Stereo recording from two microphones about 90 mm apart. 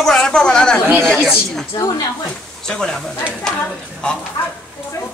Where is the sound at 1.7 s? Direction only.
40° left (ahead or behind).